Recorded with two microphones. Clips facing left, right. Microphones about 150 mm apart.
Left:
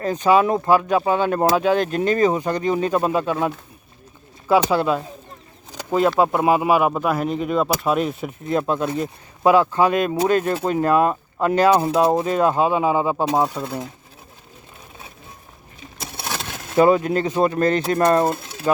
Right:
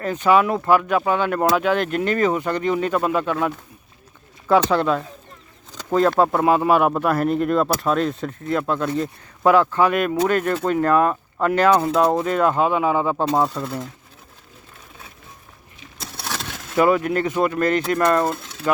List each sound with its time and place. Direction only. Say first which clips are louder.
0.3 s speech: even; 35° left (ahead or behind)
0.5 s speech: left 1 dB; 20° left (ahead or behind)
2.4 s speech: left 1 dB; 15° left (ahead or behind)
2.7 s speech: left 1 dB; 30° left (ahead or behind)
4.4 s speech: even; 5° left (ahead or behind)
6.1 s speech: even; 10° left (ahead or behind)
16.0 s a sound: left 1 dB; centre (ahead or behind)
16.7 s speech: left 2 dB; 25° left (ahead or behind)